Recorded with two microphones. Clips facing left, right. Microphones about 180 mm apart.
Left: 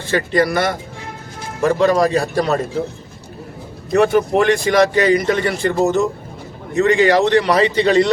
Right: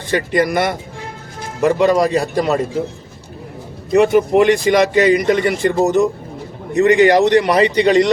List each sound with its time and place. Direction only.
0.1 s speech: 15° right (ahead or behind)
3.9 s speech: 20° right (ahead or behind)